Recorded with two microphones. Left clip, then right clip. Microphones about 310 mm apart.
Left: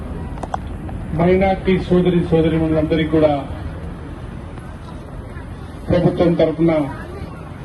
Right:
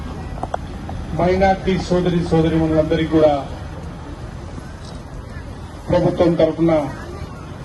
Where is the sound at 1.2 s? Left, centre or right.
Right.